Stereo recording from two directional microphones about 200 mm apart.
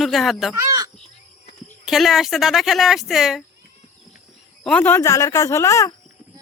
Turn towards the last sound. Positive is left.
turn(degrees=15)  # may be behind; listen again after turning